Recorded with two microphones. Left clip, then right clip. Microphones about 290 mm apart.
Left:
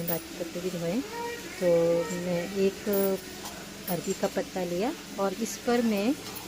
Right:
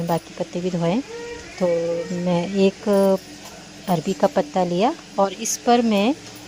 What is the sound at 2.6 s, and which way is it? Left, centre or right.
Speech, right.